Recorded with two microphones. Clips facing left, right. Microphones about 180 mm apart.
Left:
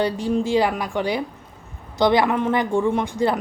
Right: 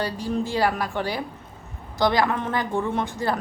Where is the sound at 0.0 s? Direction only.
20° left (ahead or behind).